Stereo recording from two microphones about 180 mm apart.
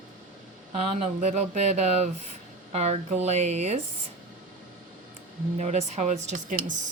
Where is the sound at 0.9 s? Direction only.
40° right (ahead or behind).